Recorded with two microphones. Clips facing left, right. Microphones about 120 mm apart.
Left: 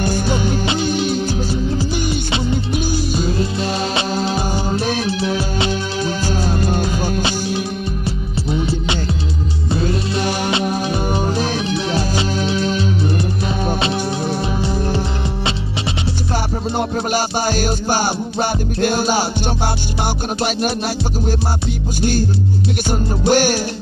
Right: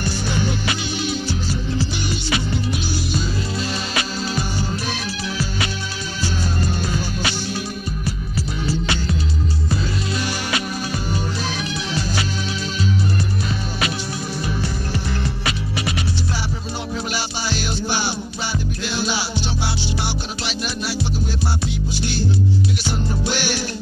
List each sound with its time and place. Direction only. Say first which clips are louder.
0.7 s music: left 7 dB; 45° left (ahead or behind)
4.7 s music: left 7 dB; 50° left (ahead or behind)
5.4 s music: left 5 dB; 25° left (ahead or behind)
6.0 s music: left 3 dB; 50° left (ahead or behind)
7.2 s music: left 5 dB; 25° left (ahead or behind)
9.8 s music: left 5 dB; 50° left (ahead or behind)
16.7 s music: left 8 dB; 50° left (ahead or behind)
22.8 s music: left 7 dB; 45° left (ahead or behind)